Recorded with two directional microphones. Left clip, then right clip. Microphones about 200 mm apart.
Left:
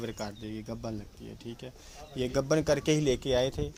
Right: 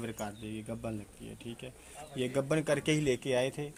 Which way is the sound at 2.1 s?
30° left (ahead or behind).